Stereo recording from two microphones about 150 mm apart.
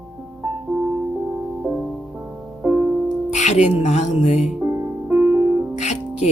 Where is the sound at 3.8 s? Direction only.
50° left (ahead or behind).